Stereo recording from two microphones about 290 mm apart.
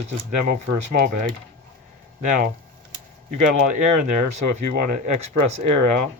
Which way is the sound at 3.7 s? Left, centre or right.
Right.